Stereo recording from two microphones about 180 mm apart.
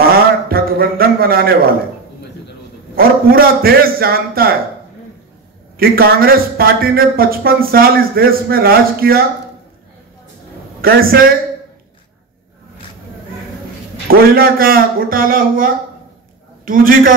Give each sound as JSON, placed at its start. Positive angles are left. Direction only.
{"t": 0.1, "sound": "a sound", "side_deg": -55}
{"t": 3.0, "sound": "speech", "side_deg": -55}
{"t": 5.8, "sound": "speech", "side_deg": -55}
{"t": 10.8, "sound": "speech", "side_deg": -55}
{"t": 14.0, "sound": "a man's voice", "side_deg": -55}